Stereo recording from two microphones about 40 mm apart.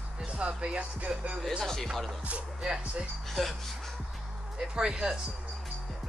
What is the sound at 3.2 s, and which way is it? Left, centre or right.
Music, centre.